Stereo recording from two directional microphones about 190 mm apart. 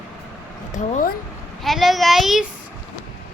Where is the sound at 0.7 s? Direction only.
40° left (ahead or behind).